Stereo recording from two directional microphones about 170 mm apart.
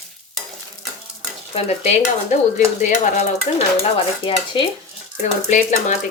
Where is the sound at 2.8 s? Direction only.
45° left (ahead or behind).